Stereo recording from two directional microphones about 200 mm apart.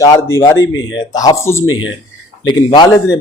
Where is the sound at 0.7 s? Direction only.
70° left (ahead or behind).